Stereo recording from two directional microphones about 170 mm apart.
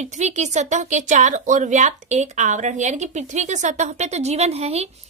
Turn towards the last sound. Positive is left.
turn(degrees=-40)  # may be behind; listen again after turning